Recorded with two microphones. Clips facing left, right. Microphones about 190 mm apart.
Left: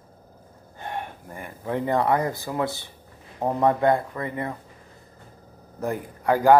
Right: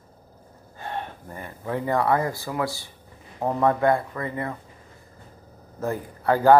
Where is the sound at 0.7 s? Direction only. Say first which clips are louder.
Even; 15° left (ahead or behind).